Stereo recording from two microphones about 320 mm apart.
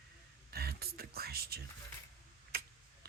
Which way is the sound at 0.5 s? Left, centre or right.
Right.